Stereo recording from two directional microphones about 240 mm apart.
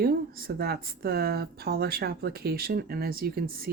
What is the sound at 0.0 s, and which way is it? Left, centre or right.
Speech, right.